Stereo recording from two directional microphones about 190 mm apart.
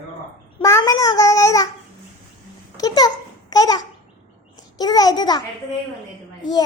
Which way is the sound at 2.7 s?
20° left (ahead or behind).